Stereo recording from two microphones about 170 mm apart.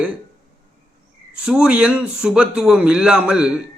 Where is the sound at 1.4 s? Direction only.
5° right (ahead or behind).